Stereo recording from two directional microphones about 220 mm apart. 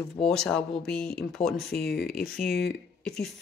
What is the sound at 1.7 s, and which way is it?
Speech, 45° left (ahead or behind).